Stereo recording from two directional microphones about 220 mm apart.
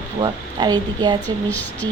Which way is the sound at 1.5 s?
5° left (ahead or behind).